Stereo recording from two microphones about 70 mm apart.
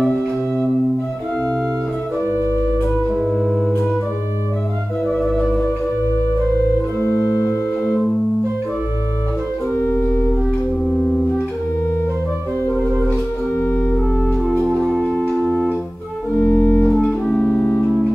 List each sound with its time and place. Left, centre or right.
7.0 s organ: left
9.8 s organ: left
10.9 s music: left
14.6 s music: centre
15.0 s music: centre
16.3 s organ: left